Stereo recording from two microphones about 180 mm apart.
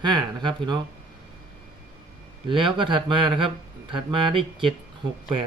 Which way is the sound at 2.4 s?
25° right (ahead or behind).